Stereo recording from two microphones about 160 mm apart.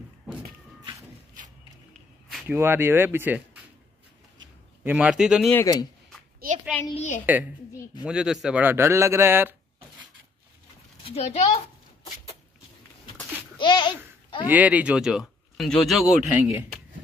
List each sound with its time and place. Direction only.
2.3 s a man's voice: 10° right (ahead or behind)
4.8 s a man's voice: 10° right (ahead or behind)
5.5 s speech: 15° left (ahead or behind)
6.4 s a sound: 65° right (ahead or behind)
6.9 s a woman's voice: 45° left (ahead or behind)
8.0 s a man's voice: 5° right (ahead or behind)
11.1 s a child's voice: 40° left (ahead or behind)
13.6 s a sound: 30° left (ahead or behind)
14.5 s speech: 10° right (ahead or behind)